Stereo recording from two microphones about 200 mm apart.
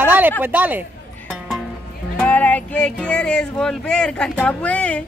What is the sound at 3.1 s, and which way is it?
Speech, 5° left (ahead or behind).